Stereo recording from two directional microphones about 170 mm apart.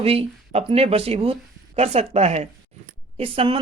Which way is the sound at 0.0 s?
35° right (ahead or behind).